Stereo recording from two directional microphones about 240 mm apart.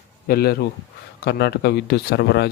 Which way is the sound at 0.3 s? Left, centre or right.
Left.